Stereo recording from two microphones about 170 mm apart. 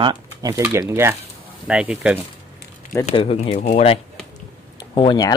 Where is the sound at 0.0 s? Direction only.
25° right (ahead or behind); by 2.2 s 5° right (ahead or behind).